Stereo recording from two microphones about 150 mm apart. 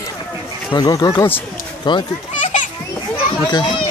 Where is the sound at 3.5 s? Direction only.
30° left (ahead or behind).